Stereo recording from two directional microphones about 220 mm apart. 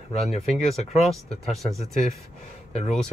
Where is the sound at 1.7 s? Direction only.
30° left (ahead or behind).